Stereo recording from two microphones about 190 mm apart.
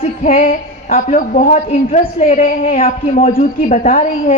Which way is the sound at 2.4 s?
45° left (ahead or behind).